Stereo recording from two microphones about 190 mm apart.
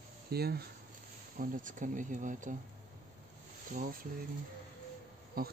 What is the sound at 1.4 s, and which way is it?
Speech, 45° right (ahead or behind).